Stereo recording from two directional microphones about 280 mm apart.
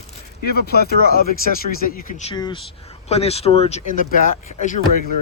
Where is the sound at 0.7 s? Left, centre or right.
Left.